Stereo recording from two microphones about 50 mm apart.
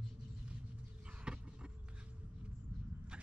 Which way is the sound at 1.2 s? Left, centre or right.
Centre.